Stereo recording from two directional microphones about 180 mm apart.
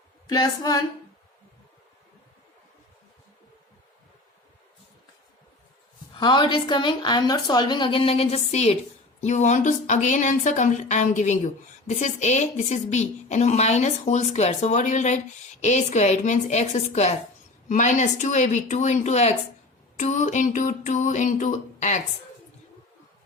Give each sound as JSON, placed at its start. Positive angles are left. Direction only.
{"t": 0.3, "sound": "a woman's voice", "side_deg": 20}
{"t": 6.1, "sound": "a woman's voice", "side_deg": 25}